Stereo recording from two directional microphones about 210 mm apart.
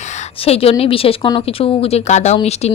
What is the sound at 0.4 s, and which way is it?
A woman's voice, 30° left (ahead or behind).